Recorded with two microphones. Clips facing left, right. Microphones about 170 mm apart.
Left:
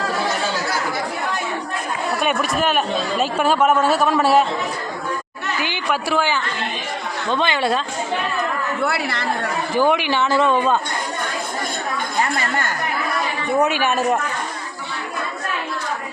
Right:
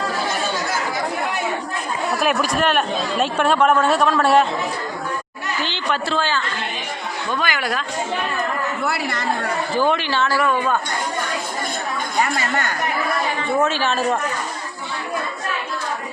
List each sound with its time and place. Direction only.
2.1 s speech: centre (ahead or behind)
5.5 s speech: 10° left (ahead or behind)
7.3 s a woman's voice: 25° left (ahead or behind)
9.7 s speech: 15° left (ahead or behind)
13.6 s speech: 15° left (ahead or behind)